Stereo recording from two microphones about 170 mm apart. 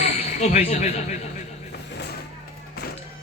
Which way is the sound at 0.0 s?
40° left (ahead or behind).